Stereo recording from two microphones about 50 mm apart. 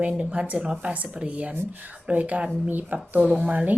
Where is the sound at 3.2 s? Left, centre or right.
Right.